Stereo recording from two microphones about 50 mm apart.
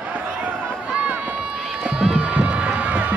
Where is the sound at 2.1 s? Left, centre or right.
Right.